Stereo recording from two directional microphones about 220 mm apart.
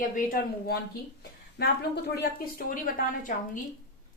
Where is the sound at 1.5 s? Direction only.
45° left (ahead or behind).